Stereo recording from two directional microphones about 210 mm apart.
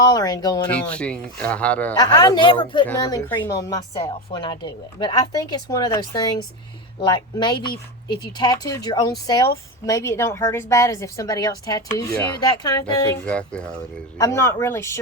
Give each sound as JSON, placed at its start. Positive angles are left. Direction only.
{"t": 0.0, "sound": "speech", "side_deg": 20}
{"t": 0.7, "sound": "speech", "side_deg": 5}
{"t": 2.0, "sound": "a woman's voice", "side_deg": 20}
{"t": 12.8, "sound": "a woman's voice", "side_deg": 5}